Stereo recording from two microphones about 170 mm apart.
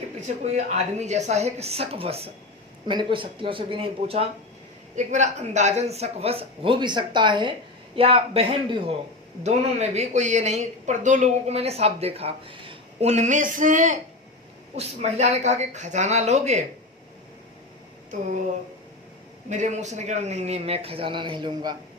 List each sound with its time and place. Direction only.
0.3 s speech: 40° right (ahead or behind)
19.5 s speech: 45° right (ahead or behind); by 21.8 s 25° right (ahead or behind)